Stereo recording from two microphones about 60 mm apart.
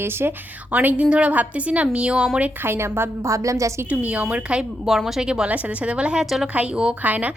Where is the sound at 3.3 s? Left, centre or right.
Right.